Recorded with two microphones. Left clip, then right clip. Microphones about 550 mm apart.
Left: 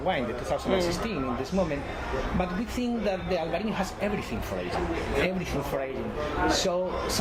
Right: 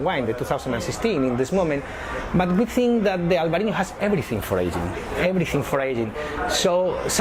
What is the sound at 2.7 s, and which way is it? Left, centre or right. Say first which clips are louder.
Speech: right 8 dB; right.